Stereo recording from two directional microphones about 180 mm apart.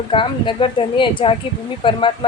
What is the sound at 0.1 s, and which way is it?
A woman's voice, 30° left (ahead or behind).